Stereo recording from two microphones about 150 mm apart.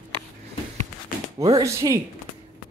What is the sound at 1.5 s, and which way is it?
Speech, 20° right (ahead or behind).